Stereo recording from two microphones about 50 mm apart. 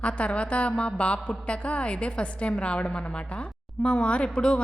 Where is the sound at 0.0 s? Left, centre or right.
Left.